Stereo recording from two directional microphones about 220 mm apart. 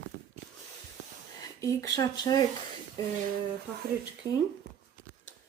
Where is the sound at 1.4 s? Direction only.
15° left (ahead or behind).